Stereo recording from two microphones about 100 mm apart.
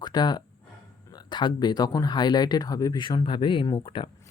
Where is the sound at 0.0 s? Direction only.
45° left (ahead or behind).